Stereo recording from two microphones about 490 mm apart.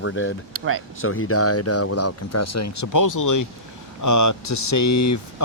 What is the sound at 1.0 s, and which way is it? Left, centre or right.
Speech, left.